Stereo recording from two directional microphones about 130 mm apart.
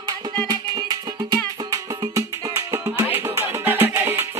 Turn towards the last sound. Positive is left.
turn(degrees=-15)  # may be behind; listen again after turning